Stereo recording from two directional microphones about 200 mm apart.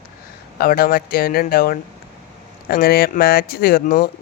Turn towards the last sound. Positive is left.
turn(degrees=45)  # may be behind; listen again after turning